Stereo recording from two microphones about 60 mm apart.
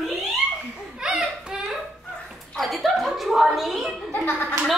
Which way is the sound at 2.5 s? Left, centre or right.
Centre.